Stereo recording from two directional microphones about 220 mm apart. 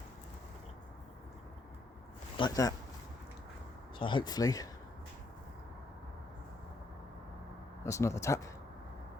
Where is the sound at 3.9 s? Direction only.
20° left (ahead or behind).